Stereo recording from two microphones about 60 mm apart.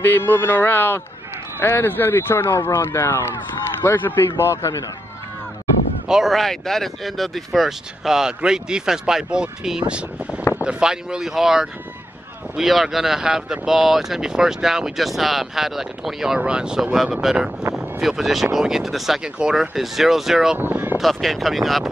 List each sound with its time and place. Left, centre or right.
0.0 s speech: left
3.8 s a man's voice: left
6.0 s speech: centre
6.3 s speech: centre
16.3 s speech: centre
20.5 s speech: right
21.0 s speech: centre